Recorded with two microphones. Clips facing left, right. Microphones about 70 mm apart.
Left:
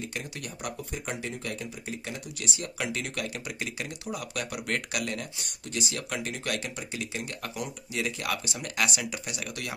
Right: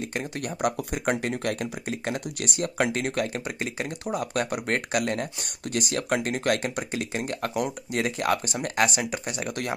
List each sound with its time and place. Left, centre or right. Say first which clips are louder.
0.1 s speech: right 7 dB; right